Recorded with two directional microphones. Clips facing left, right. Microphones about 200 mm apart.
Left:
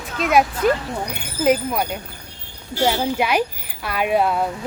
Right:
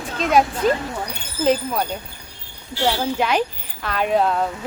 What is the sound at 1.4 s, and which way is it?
Speech, 10° left (ahead or behind).